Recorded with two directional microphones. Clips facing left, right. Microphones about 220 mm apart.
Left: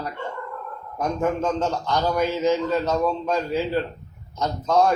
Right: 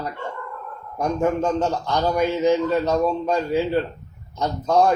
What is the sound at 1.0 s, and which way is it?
Speech, 15° right (ahead or behind).